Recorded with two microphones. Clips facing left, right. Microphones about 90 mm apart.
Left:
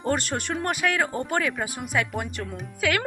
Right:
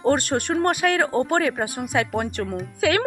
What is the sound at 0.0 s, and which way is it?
Speech, 40° right (ahead or behind).